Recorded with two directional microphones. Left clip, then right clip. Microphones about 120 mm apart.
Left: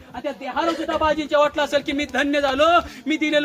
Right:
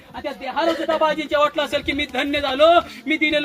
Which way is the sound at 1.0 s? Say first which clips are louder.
Left 2 dB; 30° left (ahead or behind).